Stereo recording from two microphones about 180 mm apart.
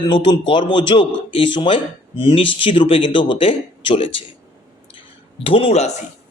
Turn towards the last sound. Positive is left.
turn(degrees=40)  # may be behind; listen again after turning